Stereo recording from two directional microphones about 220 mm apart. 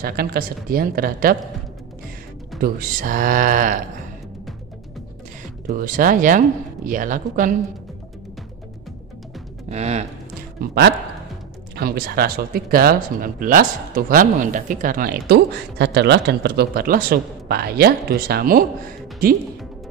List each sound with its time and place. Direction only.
0.0 s speech: 45° right (ahead or behind)
2.6 s speech: 40° right (ahead or behind)
5.7 s speech: 40° right (ahead or behind)
9.7 s speech: 30° right (ahead or behind)
10.6 s speech: 45° right (ahead or behind)